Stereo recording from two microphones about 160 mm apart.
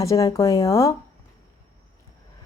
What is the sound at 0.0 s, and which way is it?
Speech, 20° left (ahead or behind).